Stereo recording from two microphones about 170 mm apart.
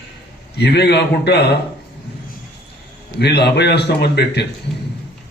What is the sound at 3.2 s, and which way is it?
A man's voice, 75° left (ahead or behind).